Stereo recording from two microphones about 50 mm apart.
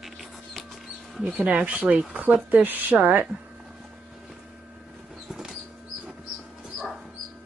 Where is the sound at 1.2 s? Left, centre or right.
Right.